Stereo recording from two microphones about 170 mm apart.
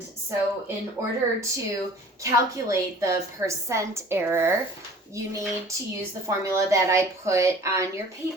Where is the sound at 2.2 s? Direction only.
20° right (ahead or behind).